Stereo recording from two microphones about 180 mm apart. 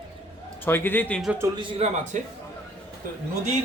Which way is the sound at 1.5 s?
35° right (ahead or behind).